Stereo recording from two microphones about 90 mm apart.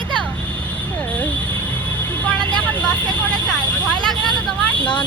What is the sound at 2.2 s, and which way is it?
Vehicle, 15° left (ahead or behind).